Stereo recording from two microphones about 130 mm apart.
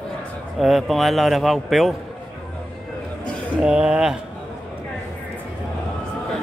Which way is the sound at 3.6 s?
5° right (ahead or behind).